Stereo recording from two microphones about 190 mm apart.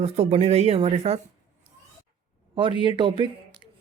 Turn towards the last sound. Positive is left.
turn(degrees=-25)  # may be behind; listen again after turning